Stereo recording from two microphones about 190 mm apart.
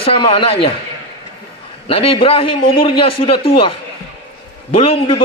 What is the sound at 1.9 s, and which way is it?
A man's voice, 30° left (ahead or behind).